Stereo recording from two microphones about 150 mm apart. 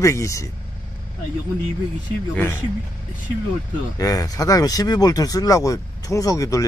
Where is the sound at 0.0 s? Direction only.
20° left (ahead or behind).